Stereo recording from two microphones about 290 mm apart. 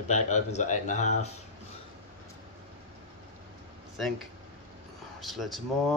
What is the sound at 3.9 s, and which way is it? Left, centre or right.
Speech, centre.